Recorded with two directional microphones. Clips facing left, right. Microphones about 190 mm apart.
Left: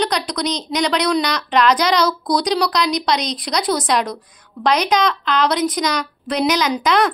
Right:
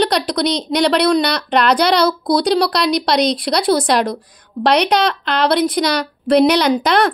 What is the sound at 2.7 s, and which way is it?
Speech, 65° right (ahead or behind).